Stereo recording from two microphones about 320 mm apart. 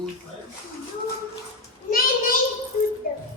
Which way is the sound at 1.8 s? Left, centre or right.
Left.